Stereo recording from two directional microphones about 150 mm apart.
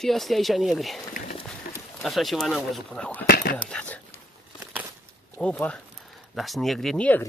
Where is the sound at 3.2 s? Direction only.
90° left.